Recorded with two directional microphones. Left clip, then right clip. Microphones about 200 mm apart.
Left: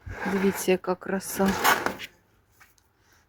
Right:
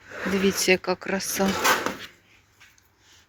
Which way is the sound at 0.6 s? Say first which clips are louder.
Right 3 dB; 20° left (ahead or behind).